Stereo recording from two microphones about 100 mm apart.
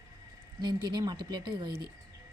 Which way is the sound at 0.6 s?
50° right (ahead or behind).